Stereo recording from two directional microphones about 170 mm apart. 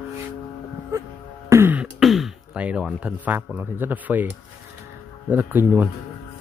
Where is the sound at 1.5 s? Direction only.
10° right (ahead or behind).